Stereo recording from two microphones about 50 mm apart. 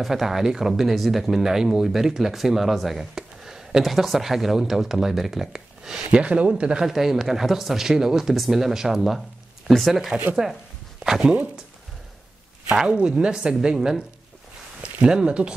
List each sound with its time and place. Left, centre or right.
0.0 s speech: centre
6.0 s speech: right
6.8 s speech: centre
12.7 s speech: centre